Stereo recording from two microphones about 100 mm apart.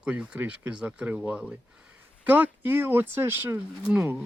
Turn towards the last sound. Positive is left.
turn(degrees=-15)  # may be behind; listen again after turning